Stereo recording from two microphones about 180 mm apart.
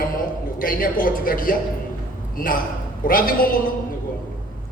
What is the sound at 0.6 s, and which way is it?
A man's voice, 50° left (ahead or behind).